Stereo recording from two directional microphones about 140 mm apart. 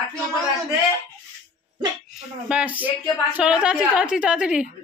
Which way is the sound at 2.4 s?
10° right (ahead or behind).